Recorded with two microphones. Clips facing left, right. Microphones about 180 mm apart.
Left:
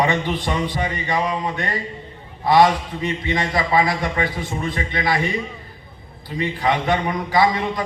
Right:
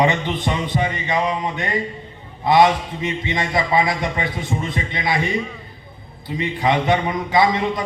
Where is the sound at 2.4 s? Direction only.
20° right (ahead or behind).